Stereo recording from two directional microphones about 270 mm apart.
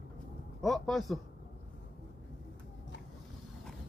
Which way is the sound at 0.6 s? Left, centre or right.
Centre.